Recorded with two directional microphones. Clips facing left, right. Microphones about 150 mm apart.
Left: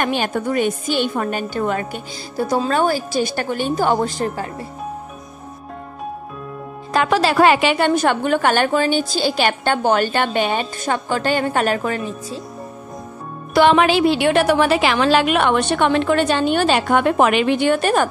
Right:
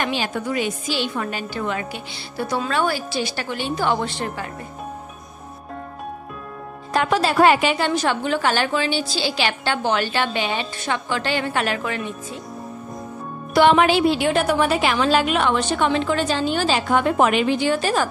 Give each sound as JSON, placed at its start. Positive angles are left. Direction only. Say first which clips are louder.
{"t": 0.0, "sound": "a woman's voice", "louder": "left 4 dB", "side_deg": 50}
{"t": 7.0, "sound": "a woman's voice", "louder": "left 2 dB", "side_deg": 90}
{"t": 13.6, "sound": "a woman's voice", "louder": "left 2 dB", "side_deg": 90}